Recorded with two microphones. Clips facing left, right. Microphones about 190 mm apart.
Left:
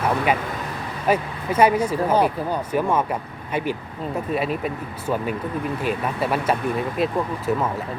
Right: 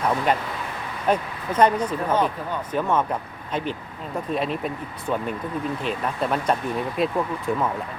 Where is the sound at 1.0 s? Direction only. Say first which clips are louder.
Left 2 dB; 10° left (ahead or behind).